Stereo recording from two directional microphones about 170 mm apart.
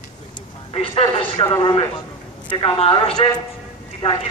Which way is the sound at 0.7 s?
35° left (ahead or behind).